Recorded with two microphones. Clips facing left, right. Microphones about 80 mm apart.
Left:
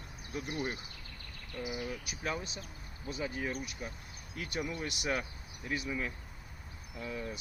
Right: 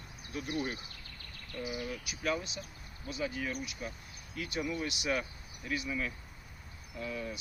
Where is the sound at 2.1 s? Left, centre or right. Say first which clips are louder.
Right 3 dB; left.